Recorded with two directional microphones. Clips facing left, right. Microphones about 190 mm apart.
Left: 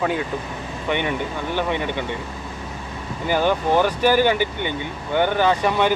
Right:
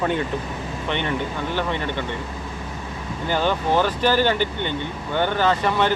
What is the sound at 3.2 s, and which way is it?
Speech, 10° left (ahead or behind).